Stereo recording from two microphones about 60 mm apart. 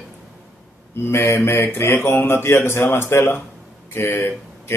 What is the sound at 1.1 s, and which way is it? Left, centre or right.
A man's voice, left.